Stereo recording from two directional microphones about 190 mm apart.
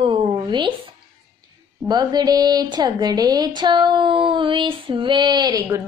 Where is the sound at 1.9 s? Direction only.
20° right (ahead or behind).